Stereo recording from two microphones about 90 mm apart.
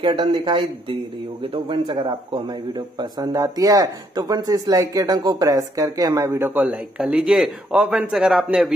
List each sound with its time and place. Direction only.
0.0 s speech: 65° right (ahead or behind)
1.5 s a man's voice: 75° right (ahead or behind)
3.0 s a man's voice: 40° right (ahead or behind); by 8.6 s 15° right (ahead or behind)